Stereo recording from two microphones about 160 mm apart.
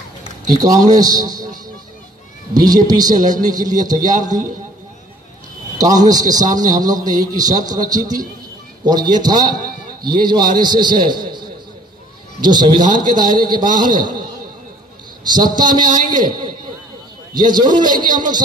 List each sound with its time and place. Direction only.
0.6 s a man's voice: 25° right (ahead or behind)
2.5 s a man's voice: 25° right (ahead or behind)
5.8 s a man's voice: 25° right (ahead or behind)
12.4 s a man's voice: 25° right (ahead or behind)
15.2 s a man's voice: 25° right (ahead or behind)